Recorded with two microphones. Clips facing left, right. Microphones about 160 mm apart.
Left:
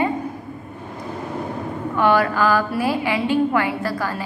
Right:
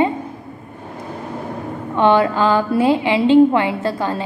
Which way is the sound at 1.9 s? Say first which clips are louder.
Right 4 dB; 25° right (ahead or behind).